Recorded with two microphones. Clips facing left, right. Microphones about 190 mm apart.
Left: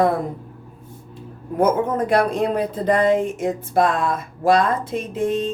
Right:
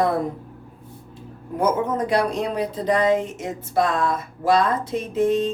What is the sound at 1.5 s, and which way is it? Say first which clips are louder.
Speech: left 3 dB; 55° left (ahead or behind).